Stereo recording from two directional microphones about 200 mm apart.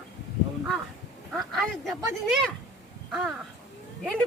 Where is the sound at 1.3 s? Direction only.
Centre (ahead or behind).